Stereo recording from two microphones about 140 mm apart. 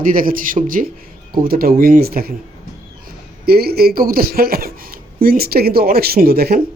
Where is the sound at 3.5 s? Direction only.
90° right.